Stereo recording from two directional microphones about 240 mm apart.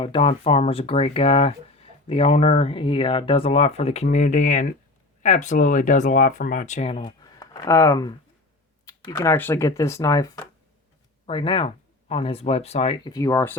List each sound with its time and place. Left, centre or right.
0.0 s speech: left